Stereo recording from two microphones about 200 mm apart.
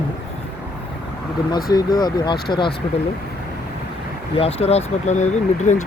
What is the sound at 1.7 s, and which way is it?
Speech, 20° left (ahead or behind).